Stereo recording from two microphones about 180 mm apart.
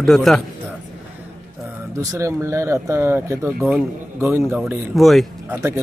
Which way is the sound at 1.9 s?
15° right (ahead or behind).